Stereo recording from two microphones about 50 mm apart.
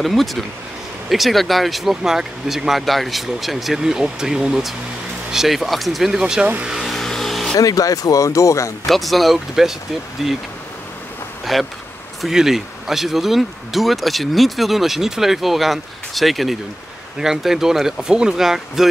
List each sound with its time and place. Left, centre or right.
0.0 s speech: centre
6.6 s speech: centre
6.9 s music: centre
8.2 s speech: left
8.8 s speech: centre
11.5 s speech: centre